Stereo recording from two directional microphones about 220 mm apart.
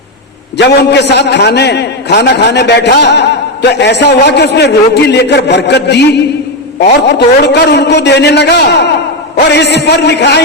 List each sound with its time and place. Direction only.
0.5 s a man's voice: 50° left (ahead or behind)